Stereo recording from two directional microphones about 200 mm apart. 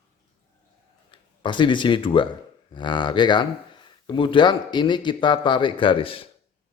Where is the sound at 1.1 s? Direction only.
25° left (ahead or behind).